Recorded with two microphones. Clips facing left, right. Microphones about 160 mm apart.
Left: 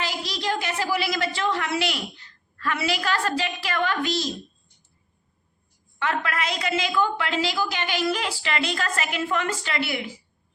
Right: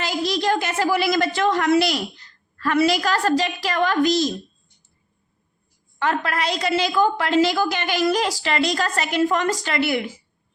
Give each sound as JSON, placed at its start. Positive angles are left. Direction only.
{"t": 0.3, "sound": "a woman's voice", "side_deg": -50}
{"t": 6.0, "sound": "a woman's voice", "side_deg": -40}